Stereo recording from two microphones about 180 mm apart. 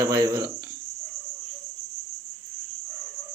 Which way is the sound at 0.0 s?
15° right (ahead or behind).